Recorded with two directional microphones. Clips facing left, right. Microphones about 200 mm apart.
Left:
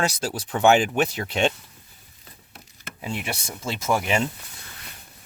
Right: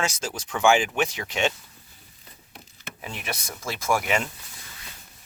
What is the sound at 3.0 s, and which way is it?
Speech, 25° left (ahead or behind).